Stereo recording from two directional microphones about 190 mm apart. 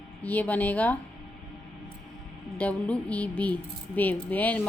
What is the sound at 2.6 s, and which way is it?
Speech, 5° left (ahead or behind).